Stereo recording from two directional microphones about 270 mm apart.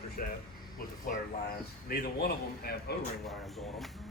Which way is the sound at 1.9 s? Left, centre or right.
Left.